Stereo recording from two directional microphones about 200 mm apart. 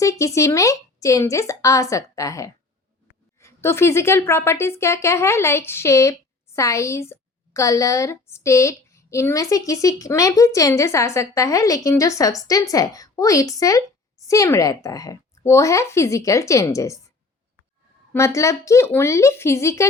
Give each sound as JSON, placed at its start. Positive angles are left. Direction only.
{"t": 0.0, "sound": "speech", "side_deg": 15}
{"t": 18.1, "sound": "speech", "side_deg": 15}